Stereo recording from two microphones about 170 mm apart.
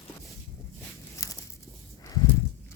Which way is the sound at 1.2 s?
20° left (ahead or behind).